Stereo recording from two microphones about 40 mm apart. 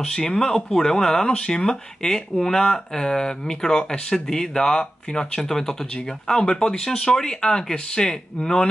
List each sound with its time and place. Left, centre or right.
0.0 s speech: centre